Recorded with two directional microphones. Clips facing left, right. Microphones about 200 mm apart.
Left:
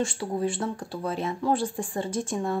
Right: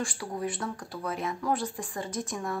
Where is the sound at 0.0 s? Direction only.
25° left (ahead or behind).